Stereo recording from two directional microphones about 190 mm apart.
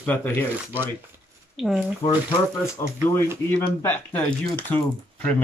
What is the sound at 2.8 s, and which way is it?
Speech, 15° left (ahead or behind).